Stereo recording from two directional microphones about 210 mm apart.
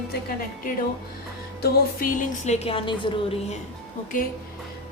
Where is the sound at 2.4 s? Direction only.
30° left (ahead or behind).